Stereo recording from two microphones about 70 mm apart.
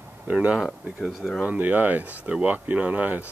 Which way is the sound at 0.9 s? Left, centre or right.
Centre.